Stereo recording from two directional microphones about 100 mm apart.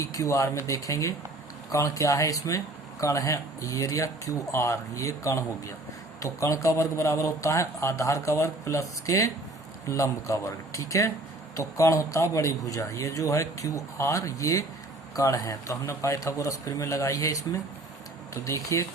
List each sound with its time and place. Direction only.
0.0 s a man's voice: 30° left (ahead or behind)